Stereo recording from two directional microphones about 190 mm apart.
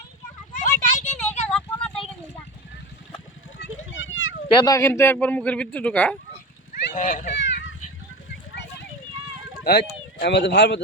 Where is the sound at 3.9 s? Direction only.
85° left.